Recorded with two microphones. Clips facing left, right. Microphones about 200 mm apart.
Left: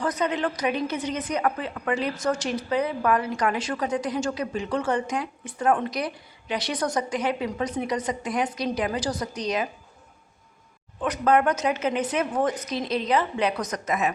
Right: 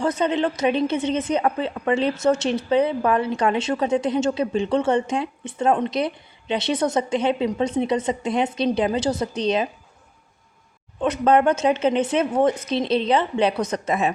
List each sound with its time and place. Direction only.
0.0 s a woman's voice: 25° right (ahead or behind)
11.0 s a woman's voice: 25° right (ahead or behind)